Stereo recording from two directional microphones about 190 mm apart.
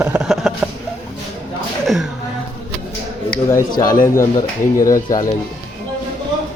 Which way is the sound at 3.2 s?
20° left (ahead or behind).